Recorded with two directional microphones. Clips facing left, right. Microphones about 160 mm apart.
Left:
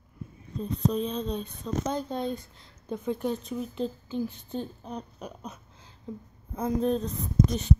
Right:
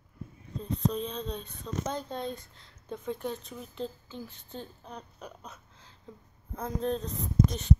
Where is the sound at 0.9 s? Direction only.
10° left (ahead or behind).